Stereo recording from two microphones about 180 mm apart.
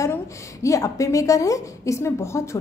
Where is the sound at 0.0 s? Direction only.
15° left (ahead or behind).